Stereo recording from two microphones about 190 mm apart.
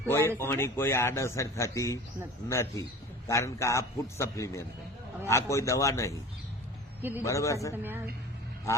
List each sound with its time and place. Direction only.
0.1 s a man's voice: 10° left (ahead or behind)
7.2 s a man's voice: 15° left (ahead or behind)
7.8 s a woman's voice: 10° right (ahead or behind)